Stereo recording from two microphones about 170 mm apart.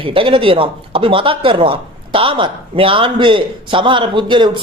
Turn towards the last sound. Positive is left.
turn(degrees=-30)  # may be behind; listen again after turning